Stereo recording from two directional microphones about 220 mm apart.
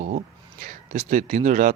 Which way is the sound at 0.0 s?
35° right (ahead or behind).